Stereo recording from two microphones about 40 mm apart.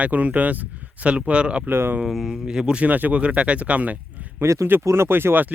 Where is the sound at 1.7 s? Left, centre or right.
Right.